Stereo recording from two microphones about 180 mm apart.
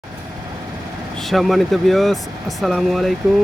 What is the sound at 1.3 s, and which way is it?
Speech, centre (ahead or behind).